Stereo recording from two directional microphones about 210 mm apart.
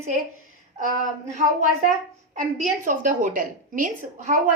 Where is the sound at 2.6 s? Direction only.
35° right (ahead or behind).